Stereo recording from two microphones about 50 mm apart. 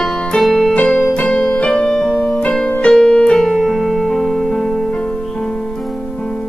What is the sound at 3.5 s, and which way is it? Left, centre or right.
Music, centre.